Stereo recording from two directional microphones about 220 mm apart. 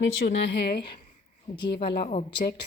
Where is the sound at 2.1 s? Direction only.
30° left (ahead or behind).